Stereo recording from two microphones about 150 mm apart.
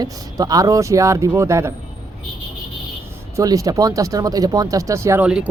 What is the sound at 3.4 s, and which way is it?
Speech, 20° right (ahead or behind).